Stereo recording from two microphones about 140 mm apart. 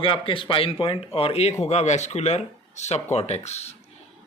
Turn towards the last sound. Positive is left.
turn(degrees=50)  # may be behind; listen again after turning